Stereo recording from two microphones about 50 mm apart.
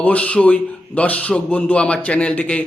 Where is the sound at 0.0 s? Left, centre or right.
Left.